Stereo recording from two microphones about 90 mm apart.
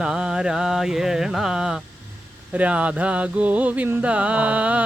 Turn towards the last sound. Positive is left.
turn(degrees=-15)  # may be behind; listen again after turning